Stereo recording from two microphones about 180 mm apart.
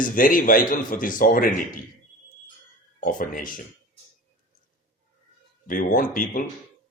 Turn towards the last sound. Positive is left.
turn(degrees=50)  # may be behind; listen again after turning